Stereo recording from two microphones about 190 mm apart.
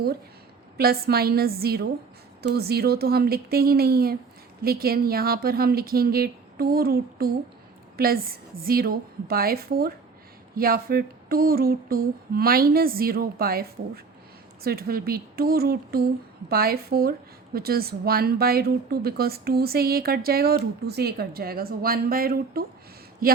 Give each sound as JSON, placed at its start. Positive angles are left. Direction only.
{"t": 0.8, "sound": "a woman's voice", "side_deg": -55}